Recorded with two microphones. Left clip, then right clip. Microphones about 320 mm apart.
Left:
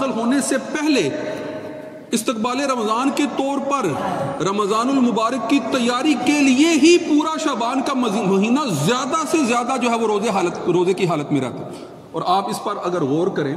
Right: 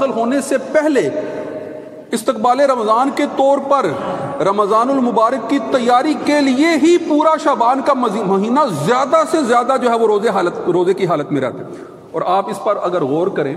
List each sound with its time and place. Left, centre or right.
0.0 s a man's voice: centre
2.1 s a man's voice: centre
12.2 s a man's voice: centre